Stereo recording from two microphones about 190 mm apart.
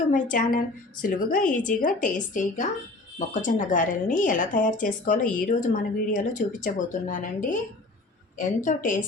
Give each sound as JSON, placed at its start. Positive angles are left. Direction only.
{"t": 0.1, "sound": "speech", "side_deg": 45}